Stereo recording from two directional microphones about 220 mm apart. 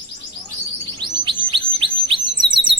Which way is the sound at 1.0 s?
20° right (ahead or behind).